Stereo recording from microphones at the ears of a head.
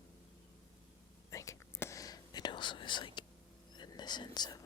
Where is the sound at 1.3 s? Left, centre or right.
Left.